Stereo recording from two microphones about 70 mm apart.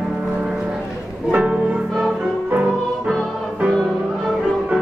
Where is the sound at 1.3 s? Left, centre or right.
Centre.